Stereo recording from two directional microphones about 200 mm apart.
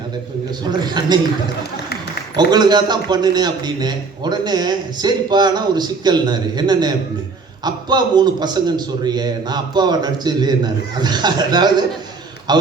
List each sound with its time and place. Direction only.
0.6 s a man's voice: 20° right (ahead or behind)
2.3 s a man's voice: 20° right (ahead or behind)